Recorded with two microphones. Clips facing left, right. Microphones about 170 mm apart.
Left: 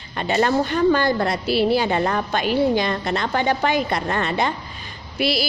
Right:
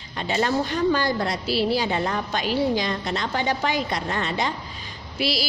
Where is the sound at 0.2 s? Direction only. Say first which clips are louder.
Left 4 dB; 55° left (ahead or behind).